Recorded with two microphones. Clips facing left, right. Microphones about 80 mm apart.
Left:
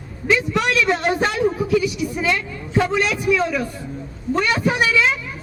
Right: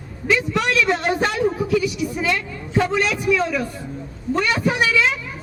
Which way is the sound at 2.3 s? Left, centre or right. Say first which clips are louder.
Left 1 dB; centre.